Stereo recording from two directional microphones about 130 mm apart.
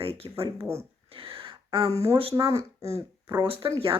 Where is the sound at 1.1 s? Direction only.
45° right (ahead or behind).